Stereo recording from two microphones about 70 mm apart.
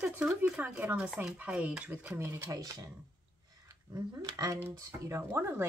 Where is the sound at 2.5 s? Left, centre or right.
Right.